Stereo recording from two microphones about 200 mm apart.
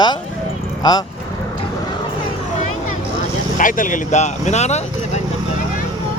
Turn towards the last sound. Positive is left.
turn(degrees=35)  # may be behind; listen again after turning